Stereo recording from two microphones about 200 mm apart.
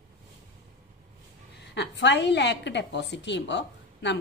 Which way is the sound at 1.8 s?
60° left (ahead or behind).